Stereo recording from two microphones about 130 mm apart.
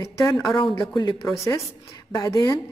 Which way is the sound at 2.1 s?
30° left (ahead or behind).